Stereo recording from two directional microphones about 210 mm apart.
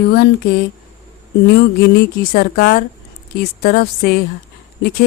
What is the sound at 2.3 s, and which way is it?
Speech, 45° left (ahead or behind).